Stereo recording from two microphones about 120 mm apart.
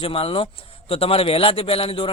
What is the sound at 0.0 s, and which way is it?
A man's voice, 50° left (ahead or behind).